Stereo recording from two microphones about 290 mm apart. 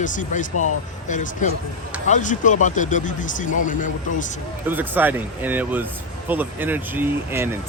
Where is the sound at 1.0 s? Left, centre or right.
Left.